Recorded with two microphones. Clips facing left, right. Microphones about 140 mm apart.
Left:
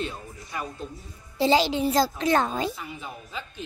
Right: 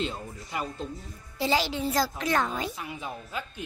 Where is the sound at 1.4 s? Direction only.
20° left (ahead or behind).